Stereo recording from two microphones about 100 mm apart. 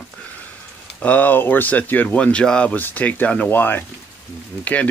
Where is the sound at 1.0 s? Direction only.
15° left (ahead or behind).